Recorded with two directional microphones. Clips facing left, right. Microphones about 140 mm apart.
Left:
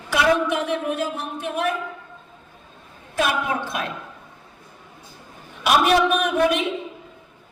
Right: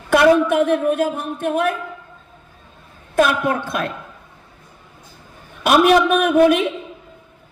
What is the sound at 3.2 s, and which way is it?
Speech, 50° right (ahead or behind).